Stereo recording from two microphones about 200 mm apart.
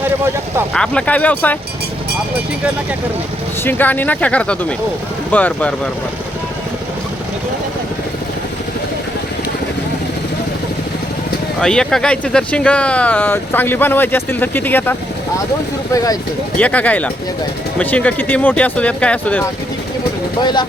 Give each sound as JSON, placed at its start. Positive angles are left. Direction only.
{"t": 0.7, "sound": "speech", "side_deg": 5}
{"t": 3.6, "sound": "speech", "side_deg": 10}
{"t": 11.6, "sound": "speech", "side_deg": 5}
{"t": 16.6, "sound": "speech", "side_deg": 5}
{"t": 20.4, "sound": "speech", "side_deg": 20}